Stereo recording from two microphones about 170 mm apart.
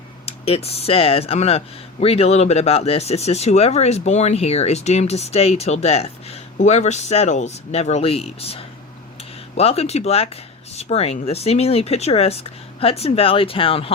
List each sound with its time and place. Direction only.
0.3 s speech: 35° left (ahead or behind)